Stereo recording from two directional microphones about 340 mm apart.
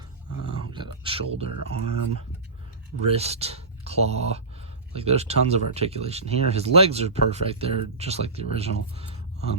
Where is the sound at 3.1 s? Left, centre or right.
Centre.